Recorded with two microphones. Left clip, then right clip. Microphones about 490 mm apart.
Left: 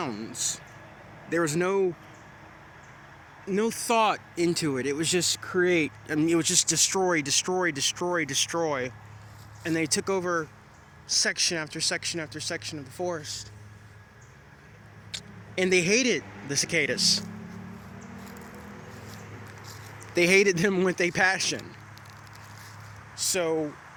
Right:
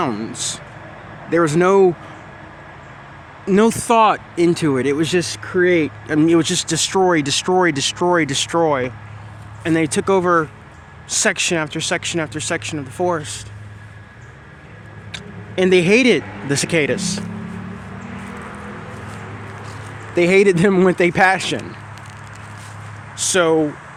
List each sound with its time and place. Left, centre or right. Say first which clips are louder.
0.0 s speech: right 10 dB; left
3.4 s speech: right 12 dB; left
3.8 s speech: right 7 dB; left
11.4 s speech: right 8 dB; left
15.1 s speech: right 8 dB; left
20.1 s speech: right 8 dB; left
23.1 s speech: right 12 dB; left